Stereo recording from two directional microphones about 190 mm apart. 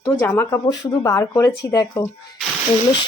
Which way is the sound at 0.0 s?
15° left (ahead or behind).